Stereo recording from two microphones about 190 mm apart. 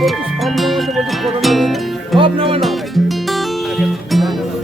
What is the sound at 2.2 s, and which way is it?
Music, 30° right (ahead or behind).